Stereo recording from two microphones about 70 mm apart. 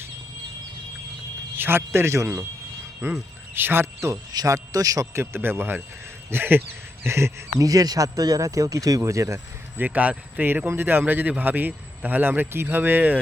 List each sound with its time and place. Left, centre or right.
1.5 s a man's voice: right
3.0 s speech: right
4.3 s a man's voice: right
5.1 s a man's voice: right
7.6 s speech: right
9.7 s a man's voice: right
10.7 s a man's voice: right